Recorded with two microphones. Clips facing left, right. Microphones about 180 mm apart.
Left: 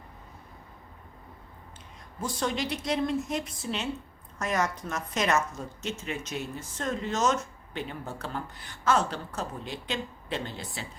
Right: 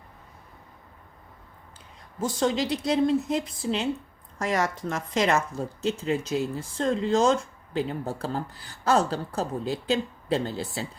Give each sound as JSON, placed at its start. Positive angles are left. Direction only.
{"t": 2.4, "sound": "a woman's voice", "side_deg": -25}